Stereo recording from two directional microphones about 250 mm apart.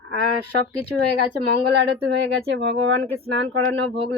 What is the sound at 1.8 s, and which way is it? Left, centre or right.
Speech, right.